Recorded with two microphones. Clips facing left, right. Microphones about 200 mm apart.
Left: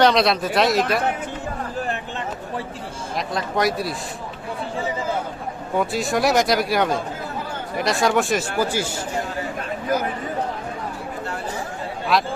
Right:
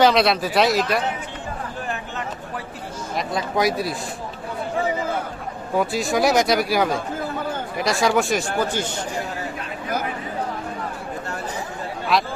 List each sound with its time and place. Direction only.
0.0 s speech: centre (ahead or behind)
3.2 s speech: centre (ahead or behind)
5.7 s speech: centre (ahead or behind)
12.1 s speech: centre (ahead or behind)